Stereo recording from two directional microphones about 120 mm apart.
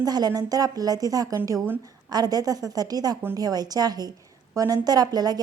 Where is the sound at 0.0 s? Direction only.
30° right (ahead or behind).